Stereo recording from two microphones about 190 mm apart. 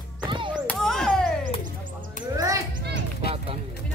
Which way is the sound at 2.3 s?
15° right (ahead or behind).